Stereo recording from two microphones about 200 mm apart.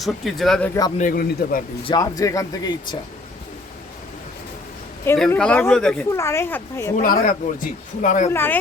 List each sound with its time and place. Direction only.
0.0 s speech: centre (ahead or behind)
0.9 s speech: 45° left (ahead or behind)
1.8 s speech: 20° left (ahead or behind)
5.0 s speech: 10° left (ahead or behind)
6.9 s speech: 45° left (ahead or behind)
8.3 s speech: 10° left (ahead or behind)